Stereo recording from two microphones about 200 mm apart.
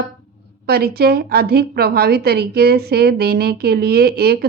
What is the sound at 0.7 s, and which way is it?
A woman's voice, 50° right (ahead or behind).